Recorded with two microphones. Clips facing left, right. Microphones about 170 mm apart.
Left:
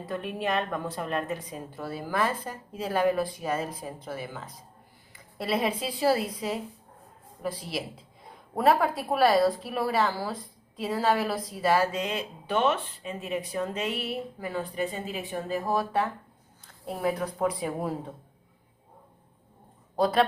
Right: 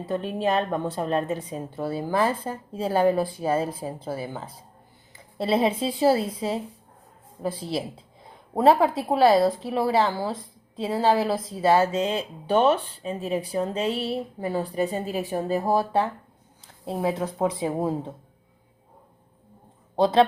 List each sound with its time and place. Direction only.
0.0 s a woman's voice: 30° right (ahead or behind)
20.0 s a woman's voice: 25° right (ahead or behind)